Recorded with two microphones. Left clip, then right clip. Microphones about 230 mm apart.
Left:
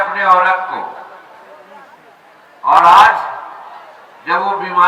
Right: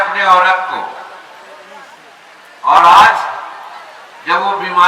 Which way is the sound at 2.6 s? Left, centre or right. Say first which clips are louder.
Right 1 dB; centre.